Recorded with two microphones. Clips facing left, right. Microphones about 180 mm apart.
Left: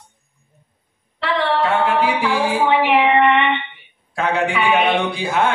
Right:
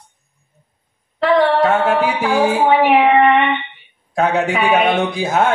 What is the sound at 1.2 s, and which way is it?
Music, 45° right (ahead or behind).